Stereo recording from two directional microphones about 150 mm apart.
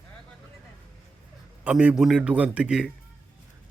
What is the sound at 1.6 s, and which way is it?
Speech, 5° right (ahead or behind).